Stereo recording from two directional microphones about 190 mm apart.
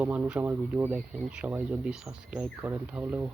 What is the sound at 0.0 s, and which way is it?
Speech, 5° right (ahead or behind).